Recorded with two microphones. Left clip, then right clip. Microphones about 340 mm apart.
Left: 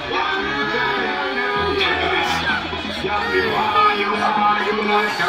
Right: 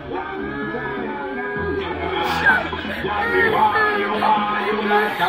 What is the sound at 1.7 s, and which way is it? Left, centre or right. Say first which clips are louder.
Music: left 6 dB; left.